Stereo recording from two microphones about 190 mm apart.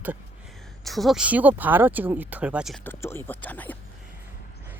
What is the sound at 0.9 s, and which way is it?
Speech, centre (ahead or behind).